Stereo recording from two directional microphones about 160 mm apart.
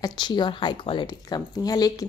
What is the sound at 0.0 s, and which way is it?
Speech, 25° left (ahead or behind).